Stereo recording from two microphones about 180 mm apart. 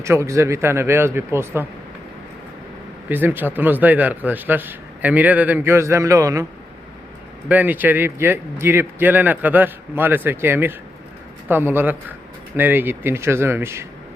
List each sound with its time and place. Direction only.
0.0 s a man's voice: 15° right (ahead or behind)
3.1 s a man's voice: 10° right (ahead or behind)
7.4 s a man's voice: 10° right (ahead or behind)